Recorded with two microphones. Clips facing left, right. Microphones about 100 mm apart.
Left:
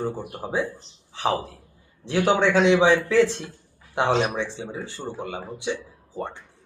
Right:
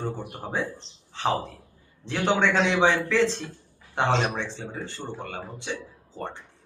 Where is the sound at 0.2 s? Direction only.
10° left (ahead or behind).